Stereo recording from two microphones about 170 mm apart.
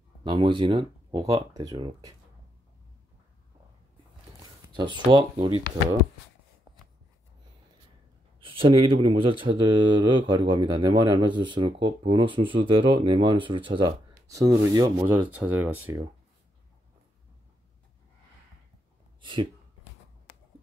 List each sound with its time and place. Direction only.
0.2 s speech: 30° right (ahead or behind)
4.7 s speech: 25° right (ahead or behind)
8.4 s speech: 30° right (ahead or behind)
15.0 s speech: 10° right (ahead or behind)